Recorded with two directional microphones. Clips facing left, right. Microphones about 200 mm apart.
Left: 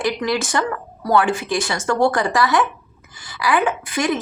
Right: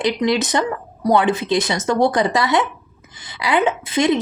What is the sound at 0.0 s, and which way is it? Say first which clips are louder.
A woman's voice: right 3 dB; 20° right (ahead or behind).